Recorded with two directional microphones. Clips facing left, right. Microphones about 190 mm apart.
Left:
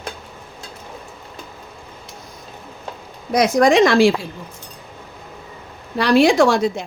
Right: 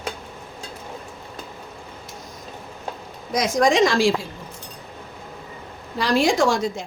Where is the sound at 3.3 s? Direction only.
60° left (ahead or behind).